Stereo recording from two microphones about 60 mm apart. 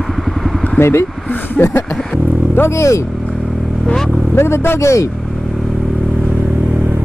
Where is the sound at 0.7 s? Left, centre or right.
Left.